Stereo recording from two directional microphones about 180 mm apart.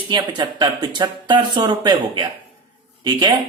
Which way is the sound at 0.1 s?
25° right (ahead or behind).